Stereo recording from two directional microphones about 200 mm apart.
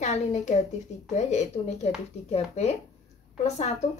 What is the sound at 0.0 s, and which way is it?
A woman's voice, 35° left (ahead or behind).